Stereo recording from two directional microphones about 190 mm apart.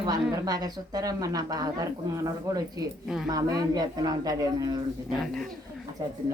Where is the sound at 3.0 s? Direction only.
Centre (ahead or behind).